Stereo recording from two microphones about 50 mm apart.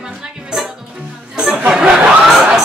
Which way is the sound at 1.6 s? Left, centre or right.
Centre.